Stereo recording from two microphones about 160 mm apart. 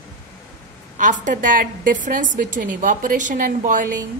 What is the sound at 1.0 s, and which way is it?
A woman's voice, 55° right (ahead or behind).